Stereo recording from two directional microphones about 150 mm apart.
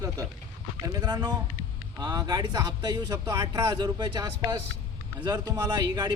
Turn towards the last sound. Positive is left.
turn(degrees=-25)  # may be behind; listen again after turning